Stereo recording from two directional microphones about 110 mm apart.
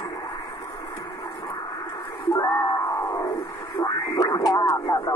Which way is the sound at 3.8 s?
35° left (ahead or behind).